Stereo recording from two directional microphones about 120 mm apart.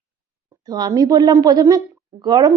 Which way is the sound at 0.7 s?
35° right (ahead or behind).